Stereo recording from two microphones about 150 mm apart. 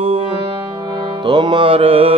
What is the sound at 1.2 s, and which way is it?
Music, 30° right (ahead or behind).